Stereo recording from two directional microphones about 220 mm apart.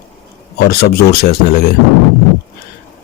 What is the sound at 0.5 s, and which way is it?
Speech, 45° left (ahead or behind).